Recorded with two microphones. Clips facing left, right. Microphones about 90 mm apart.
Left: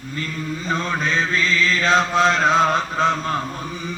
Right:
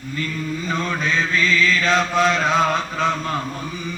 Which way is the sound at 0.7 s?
25° left (ahead or behind).